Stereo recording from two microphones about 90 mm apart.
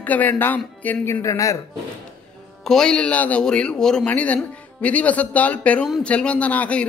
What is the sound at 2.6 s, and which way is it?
Speech, 5° left (ahead or behind).